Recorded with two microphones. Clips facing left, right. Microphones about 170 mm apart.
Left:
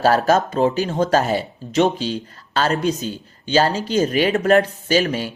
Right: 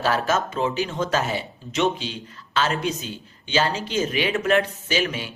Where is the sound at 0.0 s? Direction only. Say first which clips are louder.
Left 6 dB; 40° left (ahead or behind).